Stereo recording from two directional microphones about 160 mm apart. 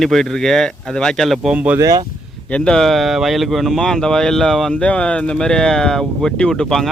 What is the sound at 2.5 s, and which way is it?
Speech, 5° left (ahead or behind).